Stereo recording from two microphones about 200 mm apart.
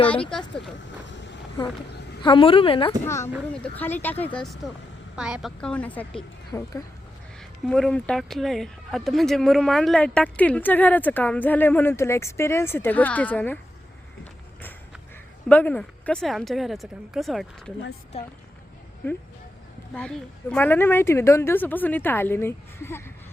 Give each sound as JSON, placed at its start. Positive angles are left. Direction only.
{"t": 0.1, "sound": "a woman's voice", "side_deg": 5}
{"t": 1.0, "sound": "vehicle", "side_deg": 65}
{"t": 2.2, "sound": "a woman's voice", "side_deg": 25}
{"t": 3.5, "sound": "a woman's voice", "side_deg": 5}
{"t": 7.6, "sound": "speech", "side_deg": 5}
{"t": 15.4, "sound": "a woman's voice", "side_deg": 5}
{"t": 19.9, "sound": "speech", "side_deg": 5}